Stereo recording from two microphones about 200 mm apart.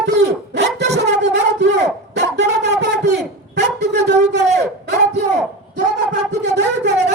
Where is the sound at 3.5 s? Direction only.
55° right (ahead or behind).